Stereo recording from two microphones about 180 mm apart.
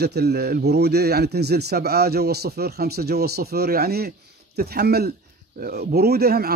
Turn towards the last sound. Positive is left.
turn(degrees=-55)  # may be behind; listen again after turning